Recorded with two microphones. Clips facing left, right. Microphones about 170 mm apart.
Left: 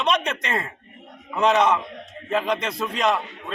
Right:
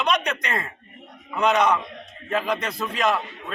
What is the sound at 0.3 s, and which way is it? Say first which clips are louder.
Speech: left 1 dB; 25° left (ahead or behind).